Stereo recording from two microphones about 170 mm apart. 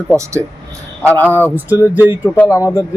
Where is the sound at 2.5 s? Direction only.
20° left (ahead or behind).